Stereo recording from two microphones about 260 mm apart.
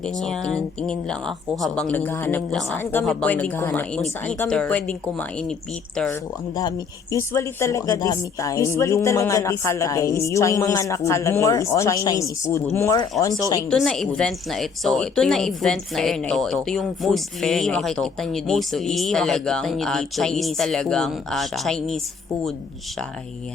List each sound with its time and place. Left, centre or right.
0.2 s a woman's voice: centre
6.6 s speech: centre
13.7 s a woman's voice: centre